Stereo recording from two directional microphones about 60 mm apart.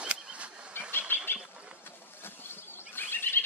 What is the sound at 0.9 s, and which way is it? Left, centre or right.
Bird, left.